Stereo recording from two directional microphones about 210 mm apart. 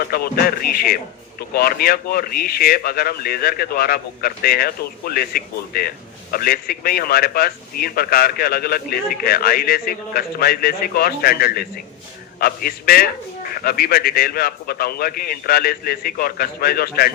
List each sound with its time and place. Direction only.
0.1 s a man's voice: 45° left (ahead or behind)